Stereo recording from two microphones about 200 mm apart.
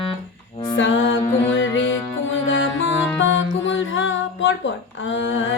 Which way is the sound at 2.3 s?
70° left (ahead or behind).